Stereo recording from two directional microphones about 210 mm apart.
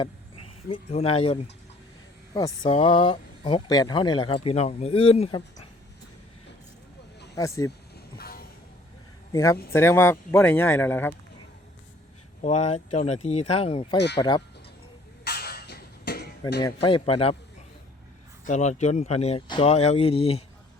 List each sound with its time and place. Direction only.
0.0 s speech: 25° left (ahead or behind)
7.3 s speech: 15° left (ahead or behind)
8.2 s vehicle: 45° left (ahead or behind)
9.3 s a man's voice: 15° left (ahead or behind)
12.4 s speech: 35° left (ahead or behind)
15.2 s a sound: 50° left (ahead or behind)
16.4 s speech: 20° left (ahead or behind)
18.4 s speech: 35° left (ahead or behind)